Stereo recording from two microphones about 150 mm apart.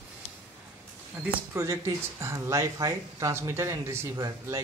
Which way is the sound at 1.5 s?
20° right (ahead or behind).